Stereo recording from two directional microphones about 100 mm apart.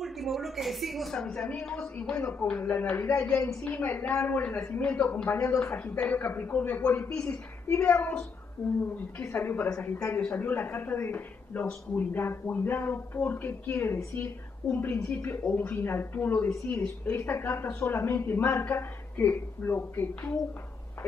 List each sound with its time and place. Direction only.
0.0 s a woman's voice: centre (ahead or behind); by 3.3 s 25° left (ahead or behind)
3.3 s speech: 10° left (ahead or behind)
7.2 s speech: 20° left (ahead or behind)
9.2 s speech: 25° left (ahead or behind)
9.7 s speech: 10° left (ahead or behind)